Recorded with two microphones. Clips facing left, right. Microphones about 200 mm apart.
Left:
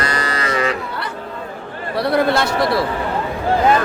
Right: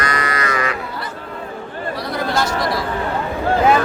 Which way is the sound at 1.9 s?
60° left (ahead or behind).